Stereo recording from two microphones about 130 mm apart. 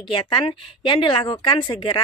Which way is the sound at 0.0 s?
40° left (ahead or behind).